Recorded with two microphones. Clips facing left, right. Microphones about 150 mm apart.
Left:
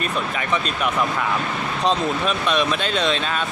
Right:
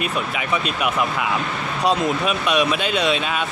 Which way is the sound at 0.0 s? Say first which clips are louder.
Even; 10° right (ahead or behind).